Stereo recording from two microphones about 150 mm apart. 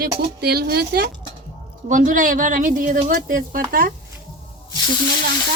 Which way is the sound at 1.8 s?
60° right (ahead or behind).